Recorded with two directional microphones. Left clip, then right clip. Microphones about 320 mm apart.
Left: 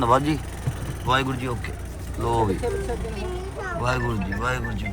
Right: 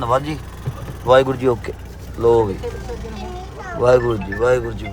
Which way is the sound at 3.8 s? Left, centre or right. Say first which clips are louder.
Right 14 dB; centre.